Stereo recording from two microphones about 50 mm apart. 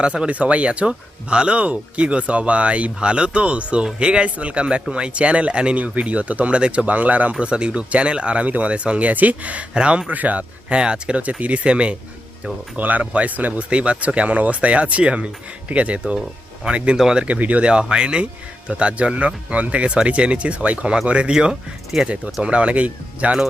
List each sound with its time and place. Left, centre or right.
0.0 s speech: right
17.2 s speech: right